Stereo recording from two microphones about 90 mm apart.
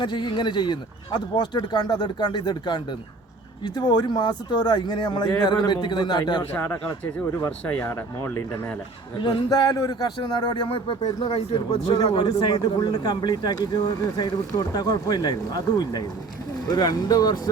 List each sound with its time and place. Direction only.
0.0 s a man's voice: 60° left (ahead or behind)
6.5 s speech: 20° left (ahead or behind)
7.9 s speech: 30° left (ahead or behind)
9.2 s speech: 50° left (ahead or behind)
10.5 s speech: 70° left (ahead or behind)
12.1 s speech: 50° left (ahead or behind)